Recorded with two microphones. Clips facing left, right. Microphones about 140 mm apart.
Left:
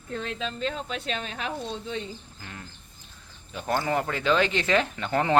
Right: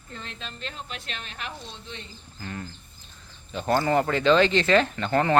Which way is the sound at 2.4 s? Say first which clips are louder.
Right 6 dB; 5° left (ahead or behind).